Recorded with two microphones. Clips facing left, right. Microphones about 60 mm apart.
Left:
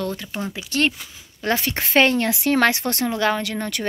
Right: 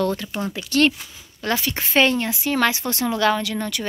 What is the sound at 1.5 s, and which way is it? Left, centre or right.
Speech, left.